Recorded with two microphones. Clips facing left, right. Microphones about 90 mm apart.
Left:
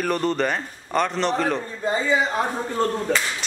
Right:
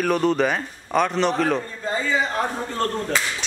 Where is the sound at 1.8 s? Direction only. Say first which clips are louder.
Left 6 dB; 20° left (ahead or behind).